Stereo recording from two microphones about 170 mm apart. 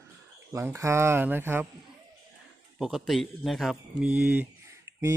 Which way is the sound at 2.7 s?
5° right (ahead or behind).